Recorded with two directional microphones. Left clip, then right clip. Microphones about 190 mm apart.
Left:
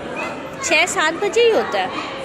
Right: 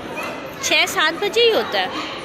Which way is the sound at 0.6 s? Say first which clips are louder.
Left 1 dB; 5° left (ahead or behind).